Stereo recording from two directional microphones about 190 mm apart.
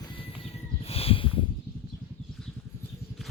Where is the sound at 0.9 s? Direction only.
30° left (ahead or behind).